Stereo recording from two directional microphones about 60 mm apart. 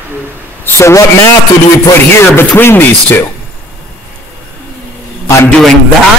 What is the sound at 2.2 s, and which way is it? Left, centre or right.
Speech, left.